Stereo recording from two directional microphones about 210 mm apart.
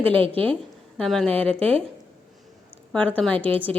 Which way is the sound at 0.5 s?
5° left (ahead or behind).